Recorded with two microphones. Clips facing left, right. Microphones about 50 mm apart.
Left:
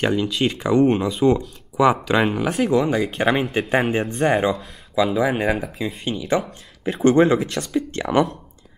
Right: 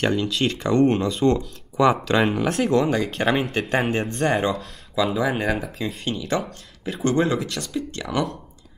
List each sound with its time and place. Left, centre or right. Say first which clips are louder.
0.0 s speech: left 2 dB; centre
7.1 s speech: left 6 dB; left